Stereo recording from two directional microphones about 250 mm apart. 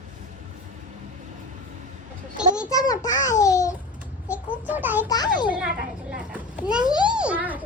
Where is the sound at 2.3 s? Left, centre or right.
Centre.